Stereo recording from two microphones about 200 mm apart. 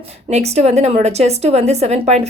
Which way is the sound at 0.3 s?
35° right (ahead or behind).